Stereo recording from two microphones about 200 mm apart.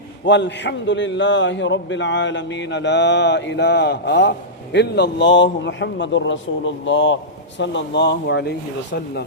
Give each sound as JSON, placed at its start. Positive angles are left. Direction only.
{"t": 0.3, "sound": "a man's voice", "side_deg": 60}